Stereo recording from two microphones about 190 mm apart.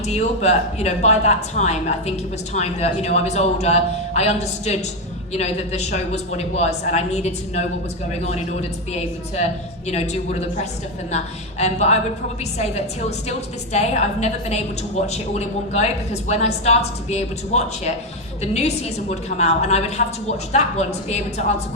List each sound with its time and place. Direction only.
0.1 s speech: 35° left (ahead or behind)
11.6 s speech: 35° left (ahead or behind)